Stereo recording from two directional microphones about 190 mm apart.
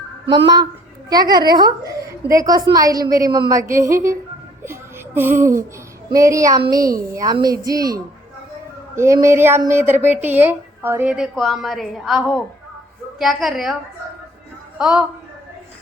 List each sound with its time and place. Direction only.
0.3 s a child's voice: 20° right (ahead or behind)
9.2 s a woman's voice: 15° right (ahead or behind)
14.8 s a woman's voice: 5° right (ahead or behind)